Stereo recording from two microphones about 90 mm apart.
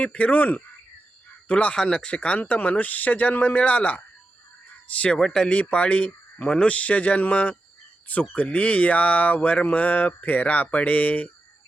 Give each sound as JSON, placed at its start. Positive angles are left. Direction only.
{"t": 0.0, "sound": "speech", "side_deg": 15}